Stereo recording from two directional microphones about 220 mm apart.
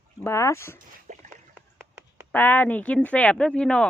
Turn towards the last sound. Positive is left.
turn(degrees=5)  # may be behind; listen again after turning